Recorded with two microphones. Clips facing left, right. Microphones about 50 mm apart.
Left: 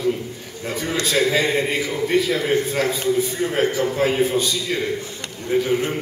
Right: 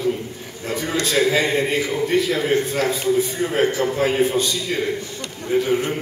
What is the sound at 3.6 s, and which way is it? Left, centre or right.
Speech, centre.